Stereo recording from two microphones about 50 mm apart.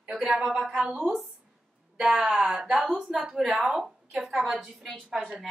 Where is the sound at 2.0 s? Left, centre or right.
Centre.